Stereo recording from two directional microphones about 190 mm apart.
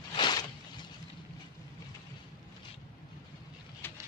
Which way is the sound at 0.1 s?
25° left (ahead or behind).